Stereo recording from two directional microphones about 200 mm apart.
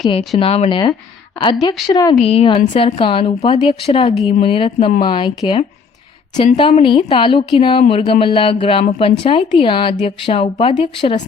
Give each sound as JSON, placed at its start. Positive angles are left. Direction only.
{"t": 0.3, "sound": "a woman's voice", "side_deg": 30}
{"t": 2.1, "sound": "a woman's voice", "side_deg": 30}